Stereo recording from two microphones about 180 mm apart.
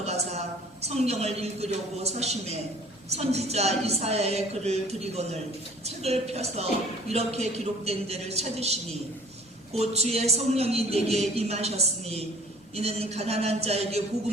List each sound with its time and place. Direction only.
0.0 s a woman's voice: 35° right (ahead or behind)